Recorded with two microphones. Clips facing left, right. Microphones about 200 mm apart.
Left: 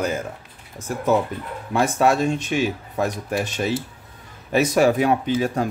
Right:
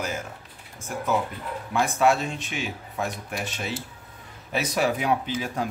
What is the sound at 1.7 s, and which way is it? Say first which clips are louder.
Speech: left 3 dB; 40° left (ahead or behind).